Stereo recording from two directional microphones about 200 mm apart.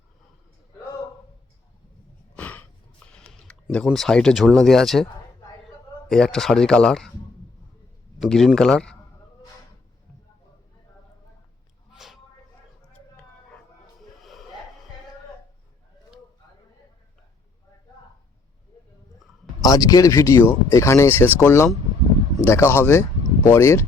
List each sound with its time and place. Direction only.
2.3 s a sound: 5° left (ahead or behind)
3.3 s speech: 5° left (ahead or behind)
6.1 s speech: 5° left (ahead or behind)
8.2 s speech: centre (ahead or behind)
11.9 s a sound: centre (ahead or behind)
14.2 s music: centre (ahead or behind)
19.6 s speech: 20° left (ahead or behind)